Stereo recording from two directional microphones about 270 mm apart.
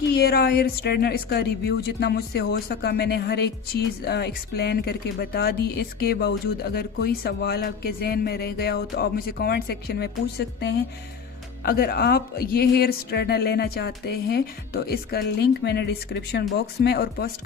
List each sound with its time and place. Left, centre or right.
0.0 s a woman's voice: left